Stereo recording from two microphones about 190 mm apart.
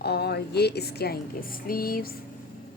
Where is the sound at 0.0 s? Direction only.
60° left (ahead or behind).